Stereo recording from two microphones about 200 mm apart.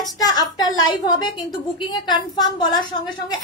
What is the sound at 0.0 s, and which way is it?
A woman's voice, 20° left (ahead or behind).